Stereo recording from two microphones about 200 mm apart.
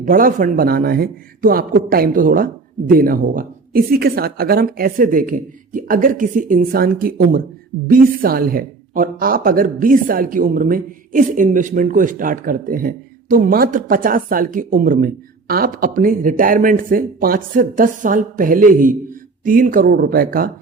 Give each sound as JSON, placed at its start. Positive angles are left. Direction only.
{"t": 0.0, "sound": "speech", "side_deg": -45}